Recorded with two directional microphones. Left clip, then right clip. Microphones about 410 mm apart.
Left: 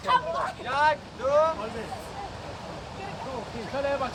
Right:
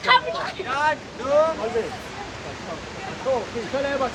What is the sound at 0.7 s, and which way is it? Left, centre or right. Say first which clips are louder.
Vehicle: right 1 dB; left.